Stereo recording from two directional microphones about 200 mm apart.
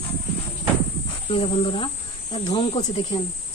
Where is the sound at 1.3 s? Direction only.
25° left (ahead or behind).